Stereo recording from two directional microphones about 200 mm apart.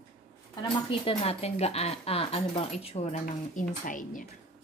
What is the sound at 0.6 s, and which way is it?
A woman's voice, 25° left (ahead or behind).